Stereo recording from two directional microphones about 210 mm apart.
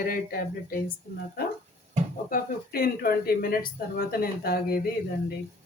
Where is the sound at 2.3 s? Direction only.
45° left (ahead or behind).